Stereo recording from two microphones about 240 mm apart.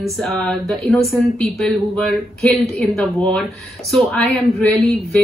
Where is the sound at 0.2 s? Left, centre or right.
Centre.